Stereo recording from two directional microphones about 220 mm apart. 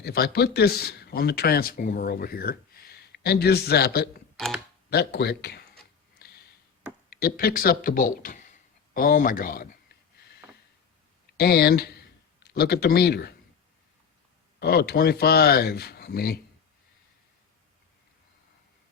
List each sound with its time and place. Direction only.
0.0 s speech: 45° left (ahead or behind)
4.4 s speech: centre (ahead or behind)
4.9 s speech: 45° left (ahead or behind)
7.1 s speech: 45° left (ahead or behind)
11.3 s speech: 45° left (ahead or behind)
14.6 s speech: 45° left (ahead or behind)